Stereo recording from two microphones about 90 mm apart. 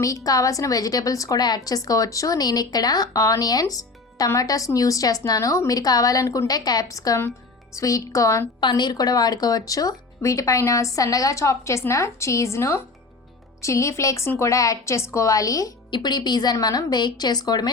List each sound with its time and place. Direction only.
0.0 s a woman's voice: 40° left (ahead or behind)
8.6 s speech: 50° left (ahead or behind)
15.9 s a woman's voice: 50° left (ahead or behind)